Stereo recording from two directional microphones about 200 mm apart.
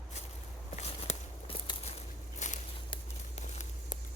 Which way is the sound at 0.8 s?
30° left (ahead or behind).